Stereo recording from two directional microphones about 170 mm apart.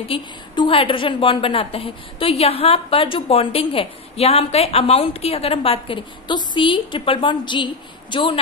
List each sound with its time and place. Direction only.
0.1 s a woman's voice: 30° left (ahead or behind)